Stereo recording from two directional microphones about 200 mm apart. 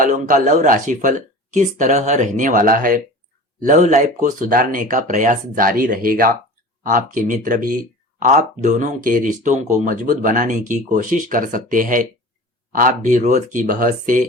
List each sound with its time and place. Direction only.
0.0 s speech: 40° right (ahead or behind)